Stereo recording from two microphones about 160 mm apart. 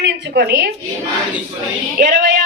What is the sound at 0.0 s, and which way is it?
Speech, 90° right.